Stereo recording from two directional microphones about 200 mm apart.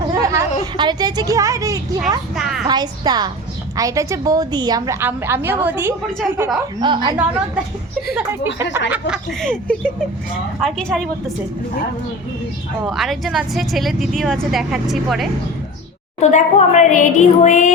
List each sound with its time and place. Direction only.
0.1 s a sound: 15° right (ahead or behind)
0.6 s a woman's voice: 20° right (ahead or behind)
2.3 s speech: centre (ahead or behind)
2.6 s a woman's voice: 20° right (ahead or behind)
6.8 s a woman's voice: 20° right (ahead or behind)
7.2 s speech: 5° right (ahead or behind)
8.9 s speech: 5° right (ahead or behind)
12.8 s speech: centre (ahead or behind)
16.2 s a woman's voice: 35° left (ahead or behind)